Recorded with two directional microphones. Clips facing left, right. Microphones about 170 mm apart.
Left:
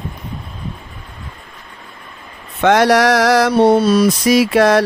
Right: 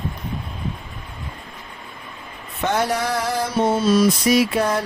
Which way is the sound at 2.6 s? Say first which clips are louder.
Left 10 dB; 85° left.